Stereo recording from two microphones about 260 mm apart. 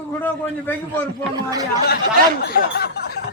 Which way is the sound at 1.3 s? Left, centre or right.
Centre.